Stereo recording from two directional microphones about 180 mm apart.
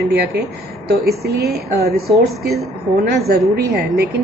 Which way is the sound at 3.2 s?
60° right (ahead or behind).